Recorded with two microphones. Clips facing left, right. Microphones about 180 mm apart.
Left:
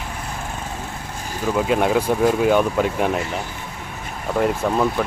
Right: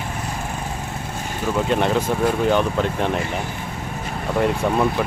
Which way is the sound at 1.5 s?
5° left (ahead or behind).